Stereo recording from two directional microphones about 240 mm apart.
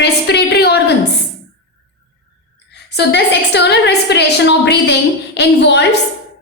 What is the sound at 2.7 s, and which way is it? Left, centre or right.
A woman's voice, left.